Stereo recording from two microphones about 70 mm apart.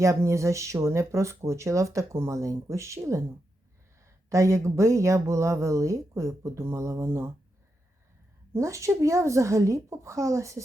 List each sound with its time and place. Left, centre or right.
0.0 s speech: right
8.5 s speech: right